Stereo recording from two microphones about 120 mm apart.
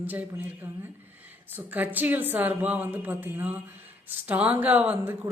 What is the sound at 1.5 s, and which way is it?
Speech, 15° right (ahead or behind).